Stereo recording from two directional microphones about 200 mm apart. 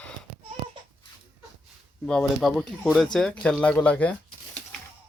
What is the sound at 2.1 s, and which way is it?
Speech, 5° left (ahead or behind).